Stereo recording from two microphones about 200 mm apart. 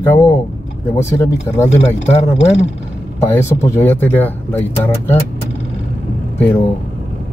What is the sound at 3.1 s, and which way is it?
Speech, 10° left (ahead or behind).